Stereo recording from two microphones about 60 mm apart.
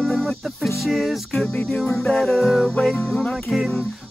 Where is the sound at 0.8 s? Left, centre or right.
Centre.